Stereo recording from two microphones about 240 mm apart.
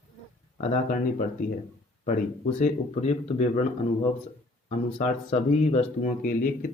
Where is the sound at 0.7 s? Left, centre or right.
Left.